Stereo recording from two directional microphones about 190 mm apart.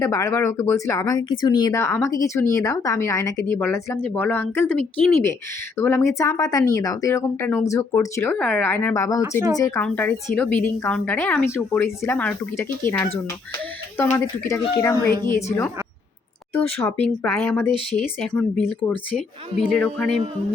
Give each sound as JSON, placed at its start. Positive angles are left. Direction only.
{"t": 0.0, "sound": "speech", "side_deg": 15}
{"t": 19.6, "sound": "speech", "side_deg": 5}